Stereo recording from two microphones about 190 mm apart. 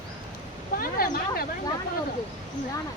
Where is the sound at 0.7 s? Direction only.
50° left (ahead or behind).